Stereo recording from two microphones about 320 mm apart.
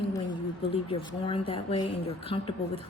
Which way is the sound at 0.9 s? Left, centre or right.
Centre.